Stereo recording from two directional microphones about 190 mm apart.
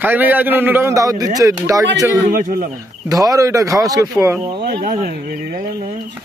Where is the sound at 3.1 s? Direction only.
20° right (ahead or behind).